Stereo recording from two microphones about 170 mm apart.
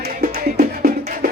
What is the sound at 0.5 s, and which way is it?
Music, 55° right (ahead or behind).